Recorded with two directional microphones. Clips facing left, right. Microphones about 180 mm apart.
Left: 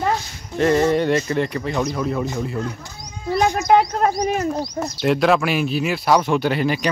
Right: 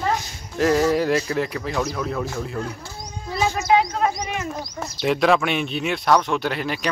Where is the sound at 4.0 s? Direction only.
40° left (ahead or behind).